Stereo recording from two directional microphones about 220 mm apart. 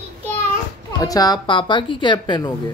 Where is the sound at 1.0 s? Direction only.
15° left (ahead or behind).